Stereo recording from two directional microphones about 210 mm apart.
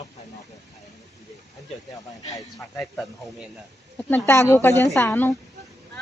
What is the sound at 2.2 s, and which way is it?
Speech, 15° left (ahead or behind).